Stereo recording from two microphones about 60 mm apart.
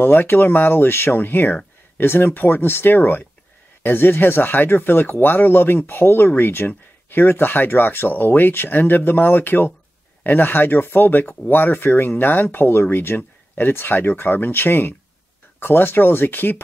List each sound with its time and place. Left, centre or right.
0.0 s speech: left